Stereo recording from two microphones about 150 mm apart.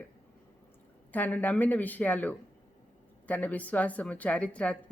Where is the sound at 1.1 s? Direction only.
10° left (ahead or behind).